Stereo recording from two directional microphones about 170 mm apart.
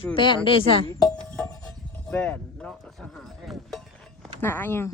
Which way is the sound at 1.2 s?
5° left (ahead or behind).